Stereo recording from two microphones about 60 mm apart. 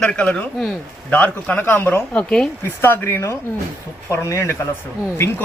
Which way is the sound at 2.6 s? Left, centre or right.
Left.